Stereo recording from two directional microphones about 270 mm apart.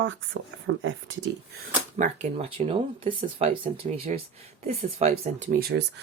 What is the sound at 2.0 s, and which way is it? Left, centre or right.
Speech, right.